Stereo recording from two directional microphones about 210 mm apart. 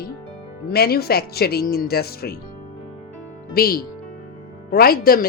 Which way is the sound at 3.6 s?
45° left (ahead or behind).